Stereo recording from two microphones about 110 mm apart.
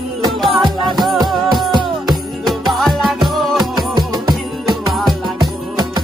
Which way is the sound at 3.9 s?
35° right (ahead or behind).